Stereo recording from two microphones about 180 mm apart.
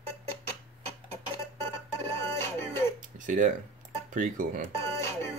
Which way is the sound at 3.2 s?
45° right (ahead or behind).